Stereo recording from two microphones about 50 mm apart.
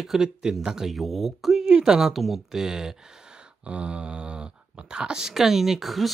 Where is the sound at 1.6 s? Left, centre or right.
Centre.